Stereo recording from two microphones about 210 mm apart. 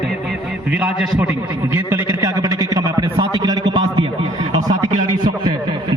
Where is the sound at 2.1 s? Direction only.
15° right (ahead or behind).